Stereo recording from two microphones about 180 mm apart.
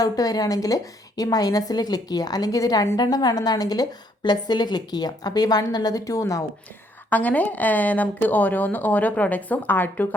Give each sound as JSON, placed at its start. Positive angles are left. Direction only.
{"t": 0.0, "sound": "a woman's voice", "side_deg": 20}